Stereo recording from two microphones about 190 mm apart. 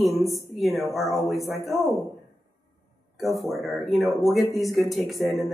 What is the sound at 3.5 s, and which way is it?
Speech, centre (ahead or behind).